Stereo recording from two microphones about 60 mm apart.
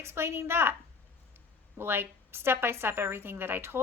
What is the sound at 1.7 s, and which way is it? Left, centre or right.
Speech, right.